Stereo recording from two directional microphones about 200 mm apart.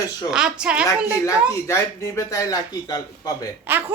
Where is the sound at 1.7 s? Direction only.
15° left (ahead or behind).